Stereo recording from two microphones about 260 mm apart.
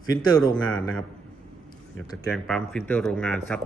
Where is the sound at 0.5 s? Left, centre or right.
Centre.